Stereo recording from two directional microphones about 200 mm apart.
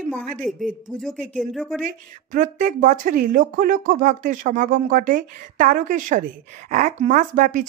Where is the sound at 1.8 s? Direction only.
40° right (ahead or behind).